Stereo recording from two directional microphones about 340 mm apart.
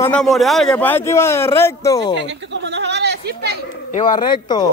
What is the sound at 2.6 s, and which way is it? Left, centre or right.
Chatter, right.